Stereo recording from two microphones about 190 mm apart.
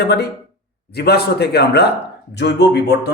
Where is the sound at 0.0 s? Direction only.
60° left (ahead or behind).